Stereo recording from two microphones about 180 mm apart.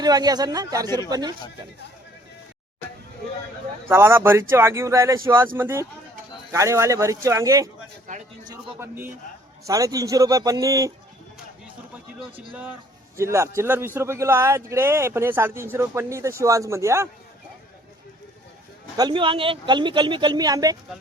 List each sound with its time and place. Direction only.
0.0 s speech: 20° right (ahead or behind)
3.8 s a man's voice: 15° right (ahead or behind)
13.1 s a man's voice: 15° right (ahead or behind)
18.9 s speech: 25° right (ahead or behind)